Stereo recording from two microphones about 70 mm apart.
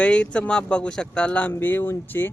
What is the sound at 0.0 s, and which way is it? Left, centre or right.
Speech, centre.